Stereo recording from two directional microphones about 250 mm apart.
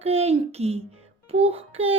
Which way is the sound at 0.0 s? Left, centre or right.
Right.